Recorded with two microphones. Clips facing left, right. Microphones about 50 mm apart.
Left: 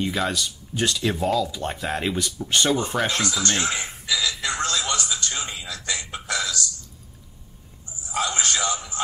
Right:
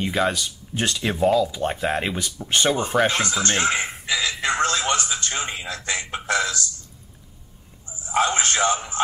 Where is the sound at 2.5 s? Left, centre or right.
Right.